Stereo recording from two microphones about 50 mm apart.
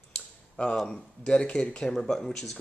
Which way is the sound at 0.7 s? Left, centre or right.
Centre.